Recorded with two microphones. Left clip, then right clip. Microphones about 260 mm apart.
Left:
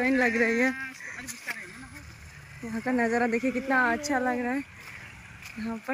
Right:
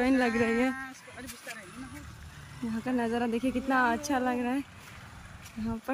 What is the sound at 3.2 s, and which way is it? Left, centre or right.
Speech, left.